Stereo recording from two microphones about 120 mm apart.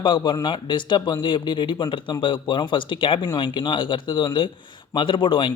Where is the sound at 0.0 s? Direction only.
40° left (ahead or behind).